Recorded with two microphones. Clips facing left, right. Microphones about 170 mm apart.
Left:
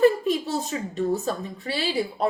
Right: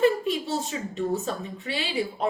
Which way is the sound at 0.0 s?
40° left (ahead or behind).